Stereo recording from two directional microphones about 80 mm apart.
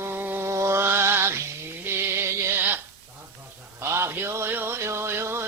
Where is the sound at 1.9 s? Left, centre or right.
Right.